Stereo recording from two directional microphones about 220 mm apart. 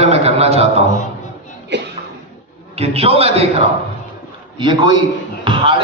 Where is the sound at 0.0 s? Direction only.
30° right (ahead or behind).